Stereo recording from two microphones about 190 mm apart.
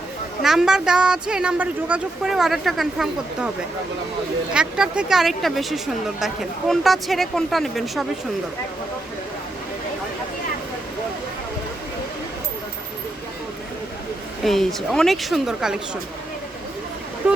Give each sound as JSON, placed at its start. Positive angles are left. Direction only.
{"t": 0.4, "sound": "speech", "side_deg": 0}
{"t": 4.5, "sound": "speech", "side_deg": -5}
{"t": 14.4, "sound": "speech", "side_deg": 0}
{"t": 17.2, "sound": "speech", "side_deg": -5}